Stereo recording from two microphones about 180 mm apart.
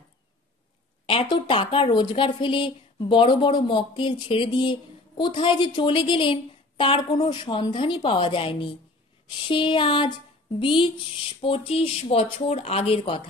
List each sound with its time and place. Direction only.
1.0 s speech: 30° left (ahead or behind)